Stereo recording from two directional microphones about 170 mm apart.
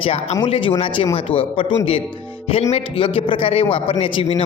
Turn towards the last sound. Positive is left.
turn(degrees=30)  # may be behind; listen again after turning